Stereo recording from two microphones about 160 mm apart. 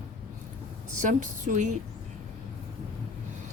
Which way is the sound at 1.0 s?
50° right (ahead or behind).